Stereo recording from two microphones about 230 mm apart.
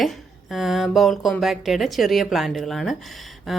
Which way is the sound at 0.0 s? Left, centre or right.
Centre.